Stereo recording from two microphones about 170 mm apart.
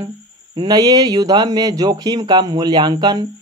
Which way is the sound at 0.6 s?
25° right (ahead or behind).